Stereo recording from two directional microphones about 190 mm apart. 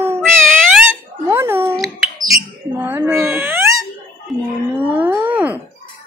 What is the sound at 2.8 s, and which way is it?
Cat, 10° right (ahead or behind).